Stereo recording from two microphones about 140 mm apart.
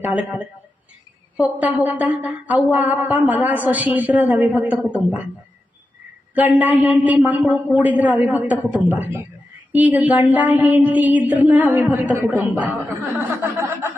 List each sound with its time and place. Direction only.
0.1 s a woman's voice: 10° right (ahead or behind)
6.3 s a woman's voice: 10° right (ahead or behind)
13.1 s a sound: 15° right (ahead or behind)